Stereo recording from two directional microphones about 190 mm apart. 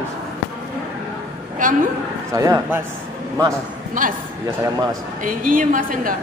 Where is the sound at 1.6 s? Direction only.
45° right (ahead or behind).